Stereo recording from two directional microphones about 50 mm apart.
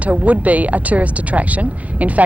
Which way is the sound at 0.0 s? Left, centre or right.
Right.